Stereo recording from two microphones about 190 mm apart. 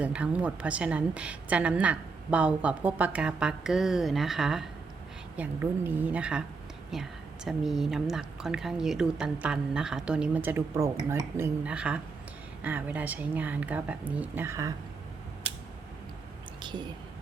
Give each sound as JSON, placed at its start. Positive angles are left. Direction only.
{"t": 0.0, "sound": "a woman's voice", "side_deg": -5}
{"t": 16.6, "sound": "whispering", "side_deg": -25}